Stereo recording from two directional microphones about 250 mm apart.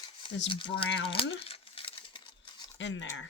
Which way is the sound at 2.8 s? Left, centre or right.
Left.